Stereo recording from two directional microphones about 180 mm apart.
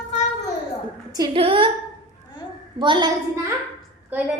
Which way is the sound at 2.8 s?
25° right (ahead or behind).